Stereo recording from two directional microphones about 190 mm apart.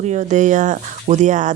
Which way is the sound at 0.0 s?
40° right (ahead or behind).